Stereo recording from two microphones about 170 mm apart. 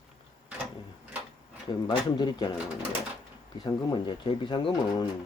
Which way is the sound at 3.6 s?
25° left (ahead or behind).